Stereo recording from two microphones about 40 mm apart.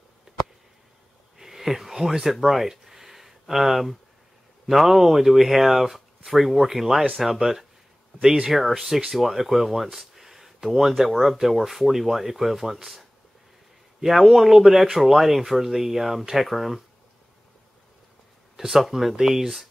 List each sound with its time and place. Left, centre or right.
1.4 s a sound: centre
4.6 s speech: centre
8.2 s speech: centre
14.0 s speech: centre
18.6 s speech: centre